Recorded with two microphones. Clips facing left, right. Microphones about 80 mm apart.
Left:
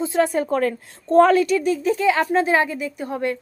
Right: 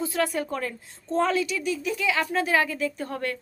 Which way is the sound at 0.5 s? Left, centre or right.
Left.